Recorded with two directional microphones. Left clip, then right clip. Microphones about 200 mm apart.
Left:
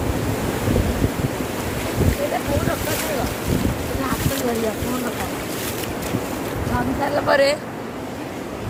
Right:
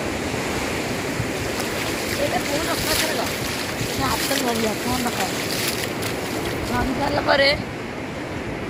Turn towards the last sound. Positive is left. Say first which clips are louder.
# left 1 dB
turn(degrees=20)  # may be behind; listen again after turning